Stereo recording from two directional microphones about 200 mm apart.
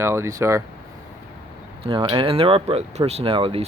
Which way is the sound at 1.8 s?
25° right (ahead or behind).